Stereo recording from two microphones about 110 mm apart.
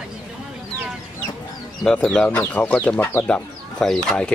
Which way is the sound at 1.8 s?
10° left (ahead or behind).